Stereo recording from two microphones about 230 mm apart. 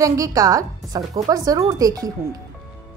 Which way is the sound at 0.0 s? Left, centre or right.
Centre.